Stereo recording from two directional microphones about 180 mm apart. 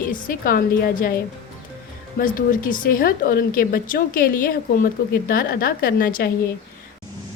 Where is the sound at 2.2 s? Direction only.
50° left (ahead or behind).